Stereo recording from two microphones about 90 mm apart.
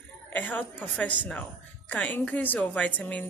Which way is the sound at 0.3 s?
20° left (ahead or behind).